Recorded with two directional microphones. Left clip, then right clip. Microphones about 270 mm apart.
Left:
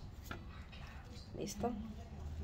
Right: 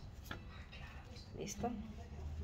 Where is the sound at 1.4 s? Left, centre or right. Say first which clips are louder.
Left 2 dB; left.